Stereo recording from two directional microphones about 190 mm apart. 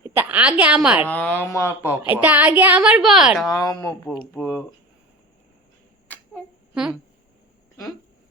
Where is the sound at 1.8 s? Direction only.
10° right (ahead or behind).